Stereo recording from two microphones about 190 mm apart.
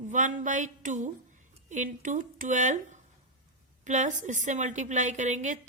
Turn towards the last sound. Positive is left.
turn(degrees=-40)  # may be behind; listen again after turning